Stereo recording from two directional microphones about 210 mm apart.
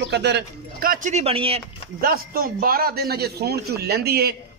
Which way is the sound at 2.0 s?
45° right (ahead or behind).